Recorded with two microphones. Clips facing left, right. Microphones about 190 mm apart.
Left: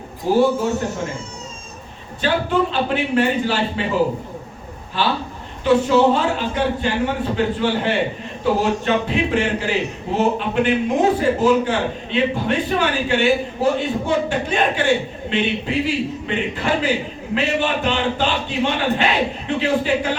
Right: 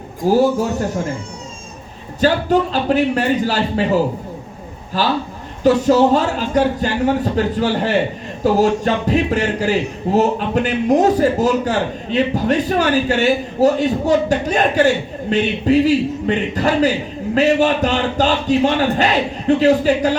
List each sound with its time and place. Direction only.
0.2 s a man's voice: 40° right (ahead or behind)
2.2 s a man's voice: 40° right (ahead or behind)
4.9 s a man's voice: 40° right (ahead or behind)